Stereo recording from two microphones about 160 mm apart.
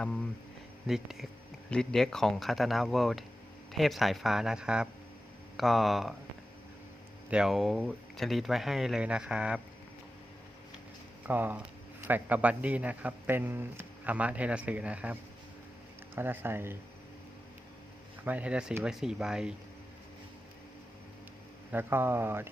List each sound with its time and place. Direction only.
0.9 s speech: centre (ahead or behind)
7.3 s speech: 5° right (ahead or behind)
11.3 s a man's voice: 10° right (ahead or behind)
18.3 s speech: 10° right (ahead or behind)
21.7 s a man's voice: 15° right (ahead or behind)